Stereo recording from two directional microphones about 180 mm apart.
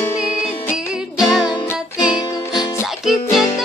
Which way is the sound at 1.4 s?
20° left (ahead or behind).